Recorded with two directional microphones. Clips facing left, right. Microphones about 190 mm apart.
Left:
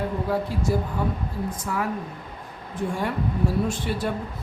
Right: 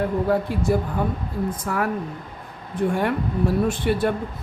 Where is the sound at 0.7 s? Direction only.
60° right (ahead or behind).